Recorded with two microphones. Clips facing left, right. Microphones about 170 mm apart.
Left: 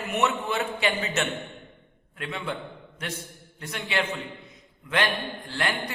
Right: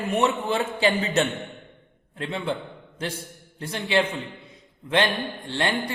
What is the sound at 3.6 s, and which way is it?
A man's voice, 30° right (ahead or behind).